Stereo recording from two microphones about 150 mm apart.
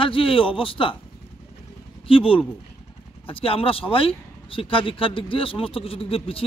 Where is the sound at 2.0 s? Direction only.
35° left (ahead or behind).